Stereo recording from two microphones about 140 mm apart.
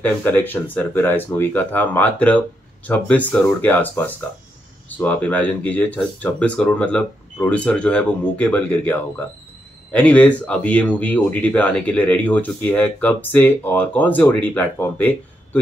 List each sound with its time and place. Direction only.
0.0 s speech: 15° left (ahead or behind)